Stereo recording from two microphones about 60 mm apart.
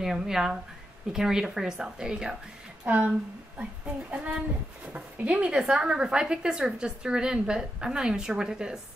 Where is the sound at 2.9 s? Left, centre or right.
Right.